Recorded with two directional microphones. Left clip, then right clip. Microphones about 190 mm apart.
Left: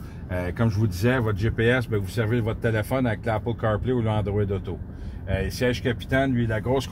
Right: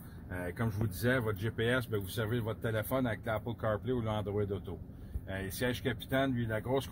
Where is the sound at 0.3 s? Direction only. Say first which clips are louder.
Left 11 dB; 35° left (ahead or behind).